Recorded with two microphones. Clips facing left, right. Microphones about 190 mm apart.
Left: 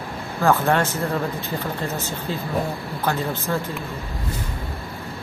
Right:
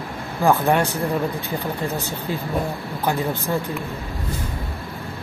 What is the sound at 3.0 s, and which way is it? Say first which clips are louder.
Speech: right 2 dB; 15° right (ahead or behind).